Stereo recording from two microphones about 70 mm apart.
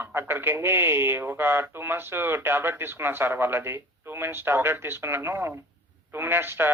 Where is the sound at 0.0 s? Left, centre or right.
Right.